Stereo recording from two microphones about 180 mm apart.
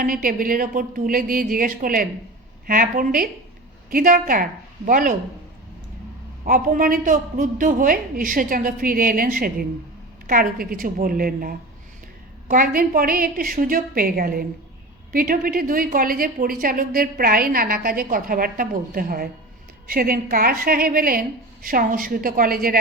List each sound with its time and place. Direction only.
0.0 s a woman's voice: 50° right (ahead or behind)
6.4 s a woman's voice: 50° right (ahead or behind)